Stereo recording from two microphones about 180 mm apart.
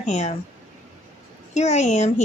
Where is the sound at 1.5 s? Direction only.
40° left (ahead or behind).